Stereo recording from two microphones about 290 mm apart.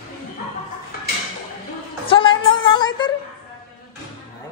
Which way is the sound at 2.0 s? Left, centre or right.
Centre.